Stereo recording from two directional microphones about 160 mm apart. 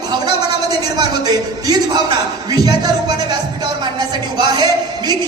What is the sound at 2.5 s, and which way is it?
Speech, 25° right (ahead or behind).